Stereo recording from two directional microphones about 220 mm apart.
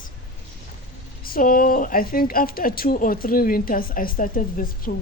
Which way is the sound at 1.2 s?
40° left (ahead or behind).